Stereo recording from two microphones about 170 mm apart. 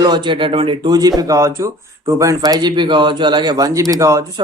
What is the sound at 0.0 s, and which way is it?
Speech, 25° right (ahead or behind).